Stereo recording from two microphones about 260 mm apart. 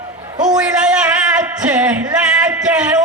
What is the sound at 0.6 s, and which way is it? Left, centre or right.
Singing, centre.